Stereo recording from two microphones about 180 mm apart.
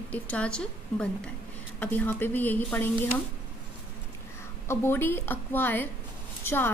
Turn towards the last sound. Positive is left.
turn(degrees=10)  # may be behind; listen again after turning